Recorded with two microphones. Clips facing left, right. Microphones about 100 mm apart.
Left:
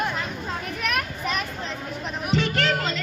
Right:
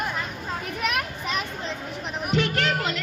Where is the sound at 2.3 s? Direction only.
10° right (ahead or behind).